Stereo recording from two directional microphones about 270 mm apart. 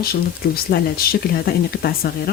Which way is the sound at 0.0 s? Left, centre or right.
Left.